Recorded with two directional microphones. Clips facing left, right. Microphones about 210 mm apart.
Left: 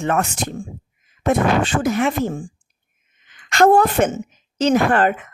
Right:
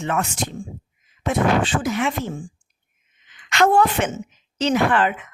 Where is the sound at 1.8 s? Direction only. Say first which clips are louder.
Left 4 dB; 45° left (ahead or behind).